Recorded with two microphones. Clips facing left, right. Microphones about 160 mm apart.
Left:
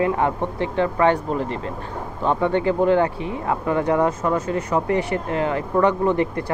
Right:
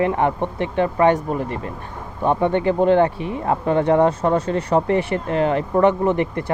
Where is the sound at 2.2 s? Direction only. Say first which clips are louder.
Right 2 dB; 20° right (ahead or behind).